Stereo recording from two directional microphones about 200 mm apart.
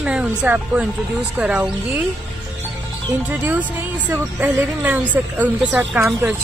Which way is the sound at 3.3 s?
10° right (ahead or behind).